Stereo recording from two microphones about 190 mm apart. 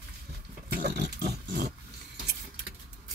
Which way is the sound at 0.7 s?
55° right (ahead or behind).